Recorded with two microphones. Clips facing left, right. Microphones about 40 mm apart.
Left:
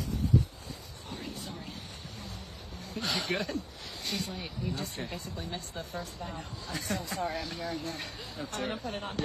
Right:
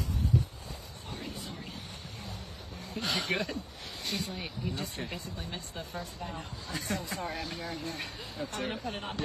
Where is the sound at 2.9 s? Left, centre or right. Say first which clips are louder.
Even; right.